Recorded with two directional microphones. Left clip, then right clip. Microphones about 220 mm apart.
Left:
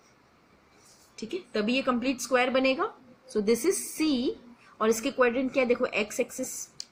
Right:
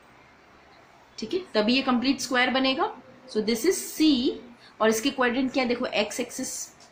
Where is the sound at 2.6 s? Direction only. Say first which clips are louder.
Right 1 dB; 20° left (ahead or behind).